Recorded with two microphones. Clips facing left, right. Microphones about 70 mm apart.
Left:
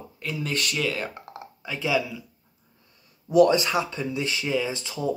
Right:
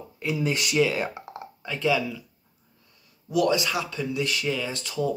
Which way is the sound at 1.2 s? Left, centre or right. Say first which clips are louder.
Right 1 dB; centre.